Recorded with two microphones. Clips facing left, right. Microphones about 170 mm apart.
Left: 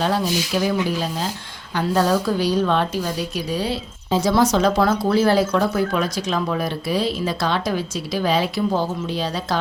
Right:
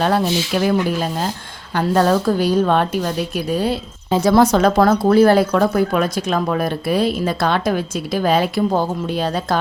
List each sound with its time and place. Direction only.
0.0 s a woman's voice: 55° right (ahead or behind)